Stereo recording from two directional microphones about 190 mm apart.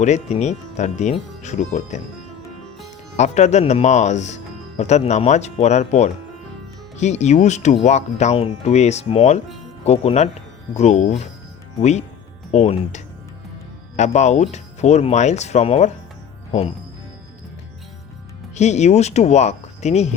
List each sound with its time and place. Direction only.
0.0 s speech: 35° left (ahead or behind)
3.2 s speech: 40° left (ahead or behind)
18.5 s speech: 35° left (ahead or behind)